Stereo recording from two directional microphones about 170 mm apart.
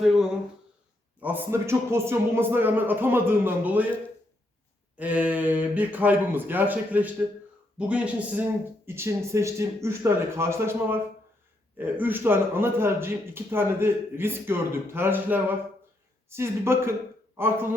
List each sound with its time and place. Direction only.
1.2 s a man's voice: 15° right (ahead or behind)
4.9 s a man's voice: 10° right (ahead or behind)